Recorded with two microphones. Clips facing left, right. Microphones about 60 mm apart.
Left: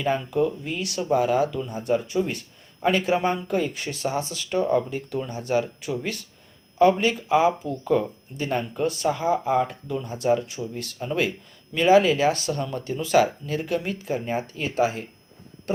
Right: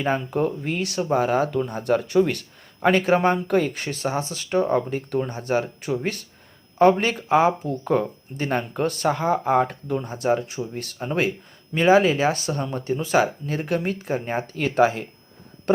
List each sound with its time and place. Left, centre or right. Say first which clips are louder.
0.0 s speech: even; right